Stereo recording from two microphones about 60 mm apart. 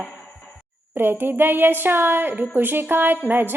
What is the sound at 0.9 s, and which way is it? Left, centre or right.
A woman's voice, right.